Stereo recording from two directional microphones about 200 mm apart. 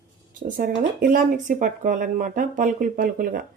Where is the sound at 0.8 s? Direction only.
40° right (ahead or behind).